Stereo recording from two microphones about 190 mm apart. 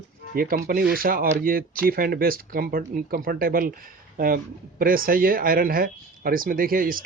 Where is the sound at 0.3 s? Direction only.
50° right (ahead or behind).